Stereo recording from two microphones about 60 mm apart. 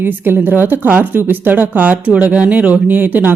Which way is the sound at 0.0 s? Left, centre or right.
Right.